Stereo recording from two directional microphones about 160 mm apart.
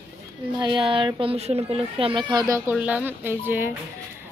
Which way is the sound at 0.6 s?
30° right (ahead or behind).